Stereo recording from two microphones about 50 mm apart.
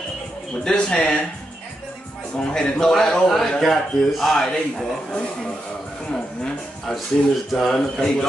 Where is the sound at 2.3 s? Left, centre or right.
Centre.